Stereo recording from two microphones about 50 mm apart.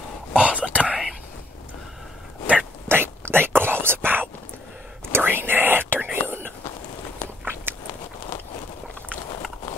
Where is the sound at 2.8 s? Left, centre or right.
Right.